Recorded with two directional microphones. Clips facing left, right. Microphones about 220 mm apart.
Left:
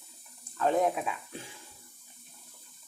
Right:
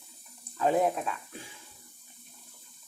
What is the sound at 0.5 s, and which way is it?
Speech, 5° right (ahead or behind).